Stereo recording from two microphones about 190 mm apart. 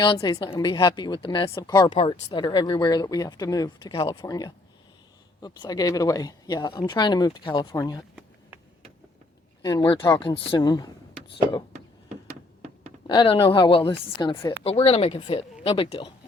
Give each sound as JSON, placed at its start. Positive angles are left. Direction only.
{"t": 0.0, "sound": "speech", "side_deg": 20}
{"t": 9.6, "sound": "speech", "side_deg": 20}
{"t": 13.1, "sound": "speech", "side_deg": 25}